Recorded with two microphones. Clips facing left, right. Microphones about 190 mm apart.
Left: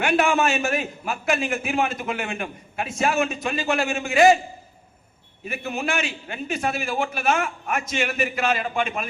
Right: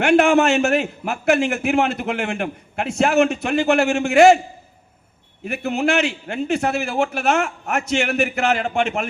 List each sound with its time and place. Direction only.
0.0 s a man's voice: 65° right (ahead or behind)
5.5 s a man's voice: 70° right (ahead or behind)